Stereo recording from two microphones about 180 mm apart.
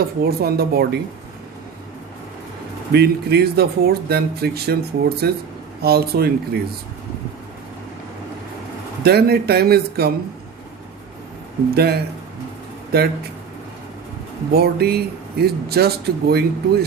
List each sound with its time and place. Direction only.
0.2 s speech: 60° right (ahead or behind)
2.9 s speech: 65° right (ahead or behind)
9.0 s speech: 60° right (ahead or behind)
11.7 s speech: 60° right (ahead or behind)
14.5 s speech: 60° right (ahead or behind)